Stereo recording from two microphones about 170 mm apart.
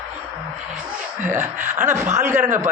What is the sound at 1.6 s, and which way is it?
Speech, 45° right (ahead or behind).